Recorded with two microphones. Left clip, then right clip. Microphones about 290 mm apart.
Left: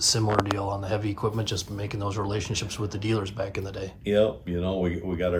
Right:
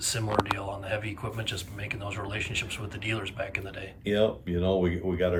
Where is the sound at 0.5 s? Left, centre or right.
Centre.